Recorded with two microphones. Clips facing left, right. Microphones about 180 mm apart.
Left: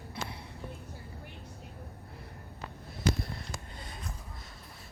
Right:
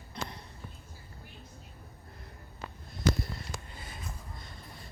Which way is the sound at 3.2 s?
Centre (ahead or behind).